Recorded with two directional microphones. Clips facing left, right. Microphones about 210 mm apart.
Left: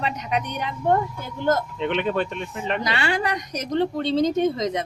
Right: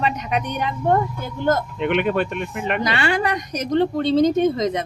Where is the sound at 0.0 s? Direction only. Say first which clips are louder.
Right 3 dB; 55° right (ahead or behind).